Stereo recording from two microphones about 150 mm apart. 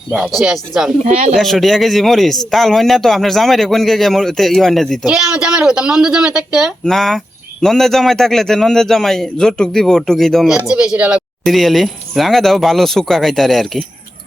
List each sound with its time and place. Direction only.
0.3 s speech: 5° right (ahead or behind)
1.0 s speech: 50° right (ahead or behind)
1.4 s speech: centre (ahead or behind)